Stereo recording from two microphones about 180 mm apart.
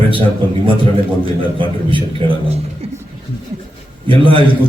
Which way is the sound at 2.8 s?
35° right (ahead or behind).